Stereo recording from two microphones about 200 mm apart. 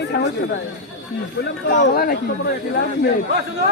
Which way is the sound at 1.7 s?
45° left (ahead or behind).